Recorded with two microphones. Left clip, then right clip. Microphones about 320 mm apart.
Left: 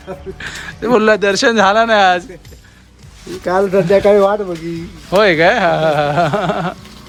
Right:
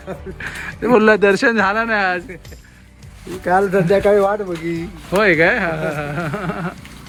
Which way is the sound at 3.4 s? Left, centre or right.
Centre.